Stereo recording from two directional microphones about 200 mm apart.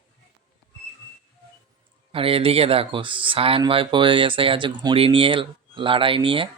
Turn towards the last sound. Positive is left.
turn(degrees=-25)  # may be behind; listen again after turning